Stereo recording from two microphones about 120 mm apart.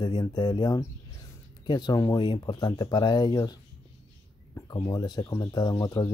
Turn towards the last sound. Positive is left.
turn(degrees=30)  # may be behind; listen again after turning